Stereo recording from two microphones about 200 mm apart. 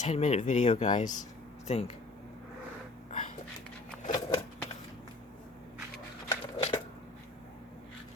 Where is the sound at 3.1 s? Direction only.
35° left (ahead or behind).